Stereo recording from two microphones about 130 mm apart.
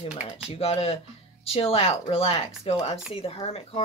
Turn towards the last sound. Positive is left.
turn(degrees=50)  # may be behind; listen again after turning